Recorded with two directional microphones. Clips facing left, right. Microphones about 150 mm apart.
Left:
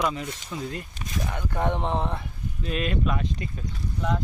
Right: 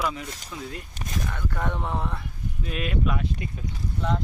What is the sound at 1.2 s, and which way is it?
Speech, 20° left (ahead or behind).